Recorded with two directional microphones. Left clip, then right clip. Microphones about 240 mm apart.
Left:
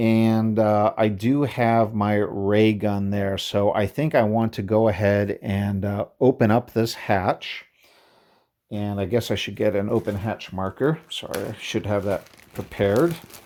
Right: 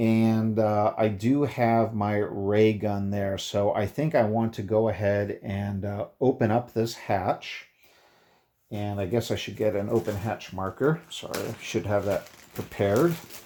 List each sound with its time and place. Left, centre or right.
0.0 s speech: left
8.7 s speech: left